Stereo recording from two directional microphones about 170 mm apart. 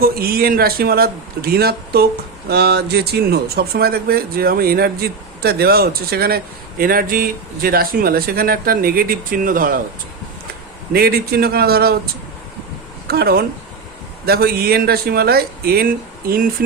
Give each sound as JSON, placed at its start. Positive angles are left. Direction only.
{"t": 0.0, "sound": "speech", "side_deg": -65}
{"t": 10.9, "sound": "speech", "side_deg": -65}
{"t": 13.1, "sound": "speech", "side_deg": -65}